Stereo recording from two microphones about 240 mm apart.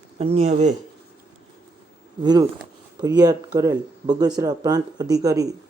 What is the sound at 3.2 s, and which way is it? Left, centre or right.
Speech, centre.